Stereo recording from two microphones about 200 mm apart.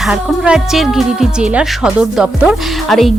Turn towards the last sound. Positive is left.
turn(degrees=0)  # may be behind; listen again after turning